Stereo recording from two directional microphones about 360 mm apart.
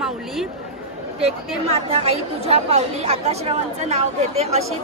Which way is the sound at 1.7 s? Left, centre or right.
Centre.